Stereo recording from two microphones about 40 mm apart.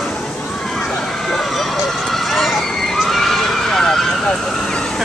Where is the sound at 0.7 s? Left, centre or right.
Centre.